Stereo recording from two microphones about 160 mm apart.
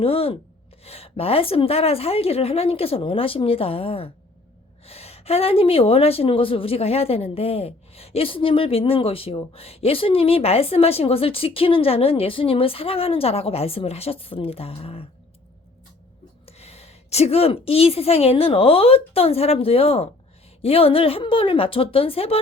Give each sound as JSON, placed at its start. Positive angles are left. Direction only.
{"t": 0.0, "sound": "a woman's voice", "side_deg": 35}
{"t": 16.5, "sound": "a woman's voice", "side_deg": 40}